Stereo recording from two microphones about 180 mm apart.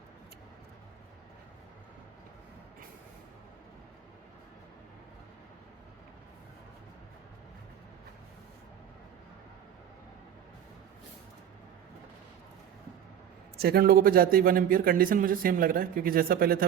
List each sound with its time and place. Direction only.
13.6 s a man's voice: 60° right (ahead or behind)